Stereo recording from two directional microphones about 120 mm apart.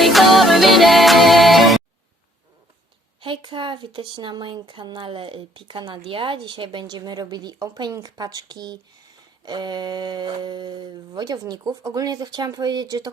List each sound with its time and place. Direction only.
0.0 s music: centre (ahead or behind)
3.2 s speech: 45° right (ahead or behind)